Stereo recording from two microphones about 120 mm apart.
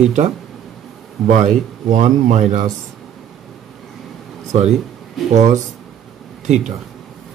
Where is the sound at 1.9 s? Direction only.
90° right.